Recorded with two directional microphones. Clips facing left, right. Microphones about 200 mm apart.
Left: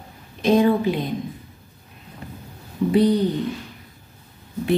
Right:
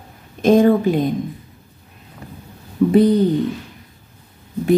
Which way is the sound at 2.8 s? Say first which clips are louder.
Right 6 dB; 55° right (ahead or behind).